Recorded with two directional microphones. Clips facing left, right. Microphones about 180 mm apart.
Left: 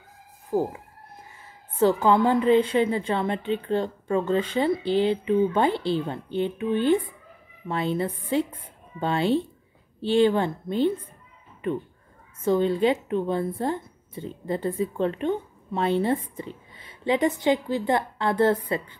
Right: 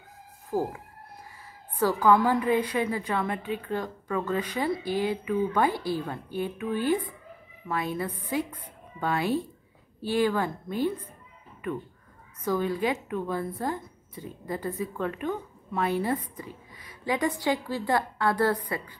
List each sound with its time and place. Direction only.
0.5 s speech: 20° left (ahead or behind)